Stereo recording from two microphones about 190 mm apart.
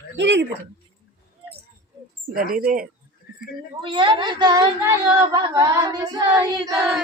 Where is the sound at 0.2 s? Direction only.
70° right (ahead or behind).